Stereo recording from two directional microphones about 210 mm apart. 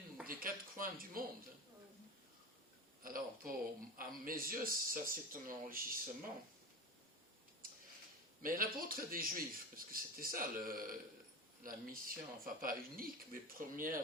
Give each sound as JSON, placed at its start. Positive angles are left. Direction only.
{"t": 0.3, "sound": "speech", "side_deg": -40}
{"t": 3.0, "sound": "speech", "side_deg": -40}
{"t": 8.4, "sound": "speech", "side_deg": -40}